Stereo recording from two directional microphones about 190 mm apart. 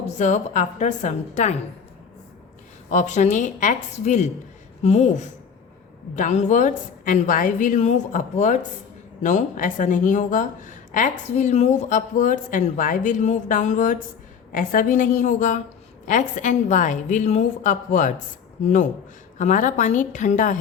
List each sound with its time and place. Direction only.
0.2 s a woman's voice: 40° left (ahead or behind)
2.9 s a woman's voice: 40° left (ahead or behind)